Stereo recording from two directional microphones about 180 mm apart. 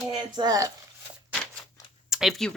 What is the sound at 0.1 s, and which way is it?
Speech, 25° right (ahead or behind).